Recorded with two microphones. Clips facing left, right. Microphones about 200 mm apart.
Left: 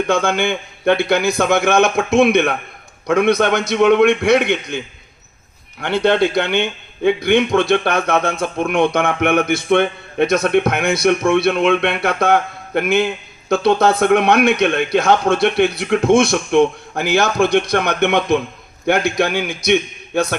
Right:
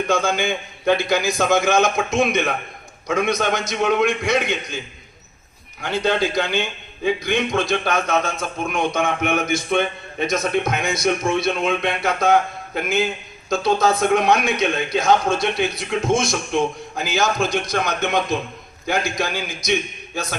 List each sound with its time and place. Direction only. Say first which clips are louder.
0.1 s a man's voice: left 3 dB; 60° left (ahead or behind)
5.8 s a man's voice: left 5 dB; 65° left (ahead or behind)